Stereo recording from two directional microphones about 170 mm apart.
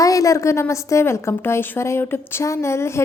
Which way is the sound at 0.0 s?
20° left (ahead or behind).